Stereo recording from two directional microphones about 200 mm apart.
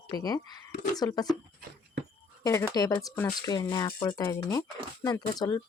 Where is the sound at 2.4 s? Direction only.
15° left (ahead or behind).